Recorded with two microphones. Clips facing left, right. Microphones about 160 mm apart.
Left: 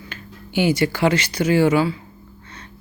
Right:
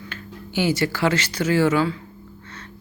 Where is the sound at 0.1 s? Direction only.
15° left (ahead or behind).